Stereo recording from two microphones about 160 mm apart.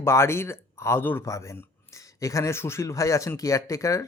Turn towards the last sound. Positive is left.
turn(degrees=20)  # may be behind; listen again after turning